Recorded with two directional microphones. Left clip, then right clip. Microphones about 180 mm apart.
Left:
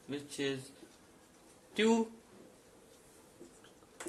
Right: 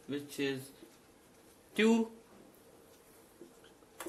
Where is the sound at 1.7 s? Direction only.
25° right (ahead or behind).